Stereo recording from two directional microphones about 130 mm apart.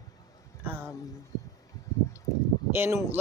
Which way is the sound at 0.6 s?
15° right (ahead or behind).